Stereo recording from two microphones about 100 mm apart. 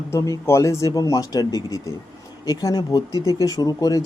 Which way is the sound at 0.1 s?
30° left (ahead or behind).